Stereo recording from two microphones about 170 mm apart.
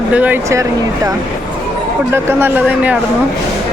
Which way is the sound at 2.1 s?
10° right (ahead or behind).